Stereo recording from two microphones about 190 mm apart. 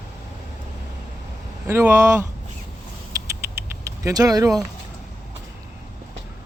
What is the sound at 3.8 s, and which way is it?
Speech, 15° right (ahead or behind).